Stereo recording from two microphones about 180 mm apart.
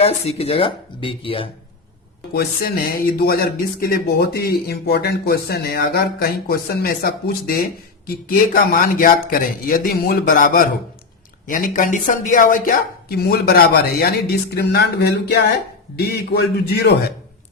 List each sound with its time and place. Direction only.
0.0 s speech: 35° left (ahead or behind)
2.3 s speech: 55° left (ahead or behind)